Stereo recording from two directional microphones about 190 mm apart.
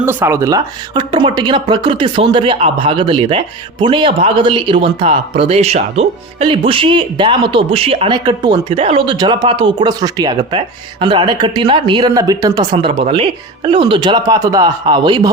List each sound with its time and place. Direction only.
0.0 s speech: 10° right (ahead or behind)